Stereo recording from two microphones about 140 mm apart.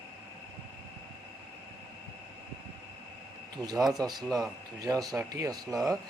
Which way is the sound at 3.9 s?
30° right (ahead or behind).